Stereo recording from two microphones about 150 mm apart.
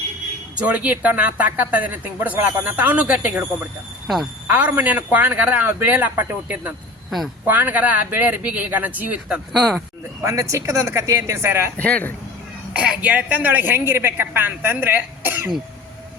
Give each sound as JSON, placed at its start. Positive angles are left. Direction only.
{"t": 0.5, "sound": "a woman's voice", "side_deg": -10}
{"t": 9.5, "sound": "speech", "side_deg": 0}
{"t": 10.2, "sound": "speech", "side_deg": -20}
{"t": 11.8, "sound": "speech", "side_deg": 10}
{"t": 12.7, "sound": "a woman's voice", "side_deg": -5}